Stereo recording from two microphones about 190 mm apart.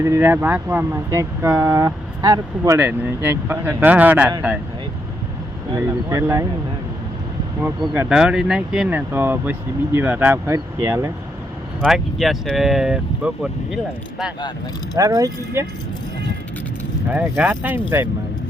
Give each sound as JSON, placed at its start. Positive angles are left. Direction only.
{"t": 0.0, "sound": "speech", "side_deg": -15}
{"t": 5.7, "sound": "speech", "side_deg": -15}
{"t": 7.6, "sound": "speech", "side_deg": -5}
{"t": 12.2, "sound": "speech", "side_deg": 0}
{"t": 14.9, "sound": "speech", "side_deg": -20}
{"t": 17.1, "sound": "speech", "side_deg": -10}